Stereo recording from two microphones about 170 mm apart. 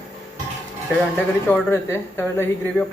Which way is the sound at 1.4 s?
10° left (ahead or behind).